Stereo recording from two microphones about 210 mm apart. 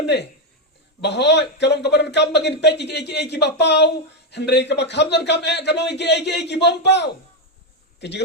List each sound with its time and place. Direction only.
1.0 s a man's voice: 55° left (ahead or behind)